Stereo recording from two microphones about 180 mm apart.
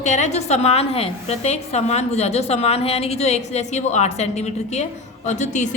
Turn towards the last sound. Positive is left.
turn(degrees=40)  # may be behind; listen again after turning